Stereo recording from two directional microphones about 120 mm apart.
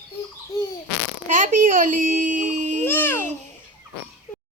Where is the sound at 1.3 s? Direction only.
90° right.